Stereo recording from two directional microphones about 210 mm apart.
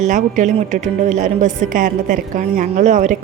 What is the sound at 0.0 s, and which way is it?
A woman's voice, 35° right (ahead or behind).